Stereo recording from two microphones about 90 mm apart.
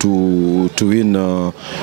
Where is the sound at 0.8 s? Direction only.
15° right (ahead or behind).